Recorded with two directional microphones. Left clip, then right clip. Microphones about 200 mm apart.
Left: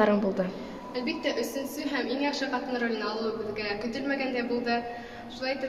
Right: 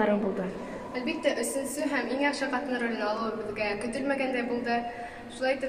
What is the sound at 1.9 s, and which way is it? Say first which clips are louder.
Speech: right 1 dB; 5° left (ahead or behind).